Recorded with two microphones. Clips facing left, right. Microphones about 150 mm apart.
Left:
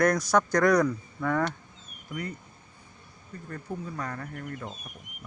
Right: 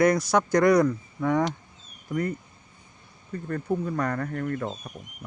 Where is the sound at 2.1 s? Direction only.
50° right (ahead or behind).